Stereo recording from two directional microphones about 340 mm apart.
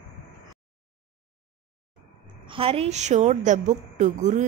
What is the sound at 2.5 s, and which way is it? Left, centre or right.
A woman's voice, centre.